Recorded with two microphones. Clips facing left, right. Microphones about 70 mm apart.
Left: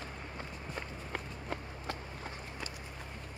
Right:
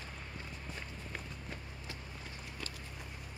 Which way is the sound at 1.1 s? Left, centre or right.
Left.